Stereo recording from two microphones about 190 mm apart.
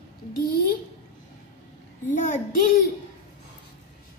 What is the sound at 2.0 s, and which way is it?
Speech, 40° left (ahead or behind).